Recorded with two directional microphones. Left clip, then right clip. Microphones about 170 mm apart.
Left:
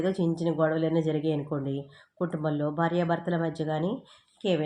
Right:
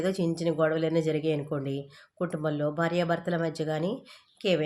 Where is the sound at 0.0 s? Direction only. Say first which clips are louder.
Even; 15° right (ahead or behind).